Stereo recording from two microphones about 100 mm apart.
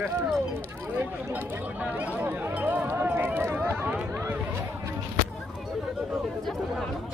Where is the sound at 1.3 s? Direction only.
15° right (ahead or behind).